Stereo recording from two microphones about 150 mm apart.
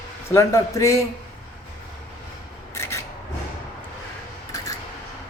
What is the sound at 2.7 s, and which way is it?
Rub, 20° left (ahead or behind).